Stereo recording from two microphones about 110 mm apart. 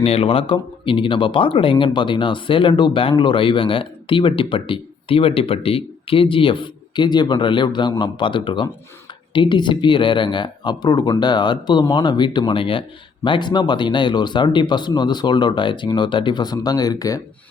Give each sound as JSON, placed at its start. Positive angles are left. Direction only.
{"t": 0.0, "sound": "speech", "side_deg": 60}